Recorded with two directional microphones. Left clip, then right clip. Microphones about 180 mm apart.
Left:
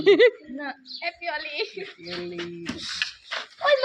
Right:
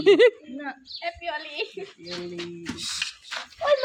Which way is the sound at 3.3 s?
30° left (ahead or behind).